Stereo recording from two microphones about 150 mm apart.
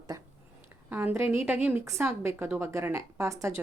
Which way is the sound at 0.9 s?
15° right (ahead or behind).